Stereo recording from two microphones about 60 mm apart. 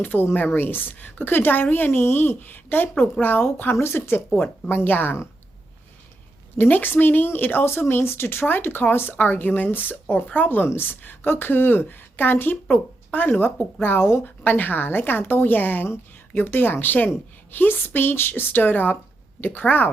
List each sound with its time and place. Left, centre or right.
0.0 s speech: left
4.3 s speech: centre
4.7 s speech: left
6.6 s speech: left